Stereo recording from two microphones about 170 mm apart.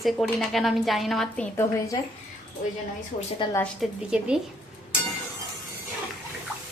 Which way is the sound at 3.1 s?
50° left (ahead or behind).